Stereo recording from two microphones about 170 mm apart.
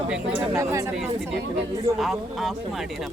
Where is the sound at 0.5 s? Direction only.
20° right (ahead or behind).